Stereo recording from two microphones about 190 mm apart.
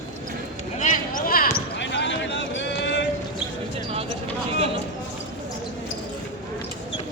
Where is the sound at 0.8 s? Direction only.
45° left (ahead or behind).